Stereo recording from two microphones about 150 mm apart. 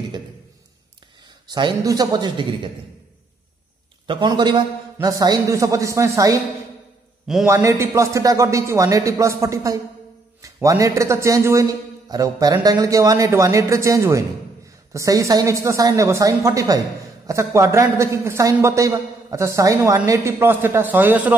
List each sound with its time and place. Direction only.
1.5 s speech: 30° right (ahead or behind)
4.1 s a man's voice: 30° right (ahead or behind)
7.4 s a man's voice: 20° right (ahead or behind)